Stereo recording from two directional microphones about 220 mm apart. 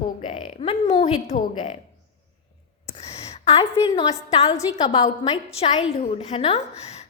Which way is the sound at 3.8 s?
25° left (ahead or behind).